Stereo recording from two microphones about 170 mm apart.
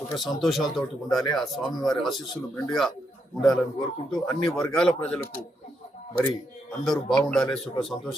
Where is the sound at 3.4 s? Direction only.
Centre (ahead or behind).